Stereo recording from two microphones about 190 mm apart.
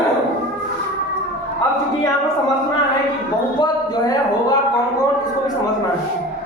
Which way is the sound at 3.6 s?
20° left (ahead or behind).